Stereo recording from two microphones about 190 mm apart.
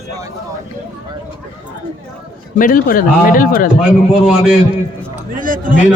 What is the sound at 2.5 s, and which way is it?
Speech, 45° left (ahead or behind).